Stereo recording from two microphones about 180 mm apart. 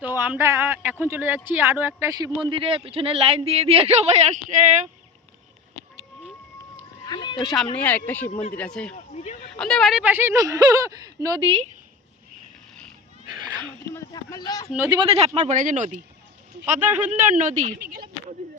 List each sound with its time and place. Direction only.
0.0 s speech: 10° right (ahead or behind); by 4.8 s 40° right (ahead or behind)
7.0 s a sound: 25° left (ahead or behind)
7.4 s speech: centre (ahead or behind)
9.1 s speech: 40° left (ahead or behind)
9.6 s speech: 5° left (ahead or behind); by 11.7 s 30° right (ahead or behind)
13.9 s speech: 20° left (ahead or behind)
14.8 s speech: 30° right (ahead or behind)
15.4 s speech: 45° right (ahead or behind)
16.8 s speech: 10° right (ahead or behind)
17.4 s speech: 40° right (ahead or behind)
17.7 s speech: 60° right (ahead or behind)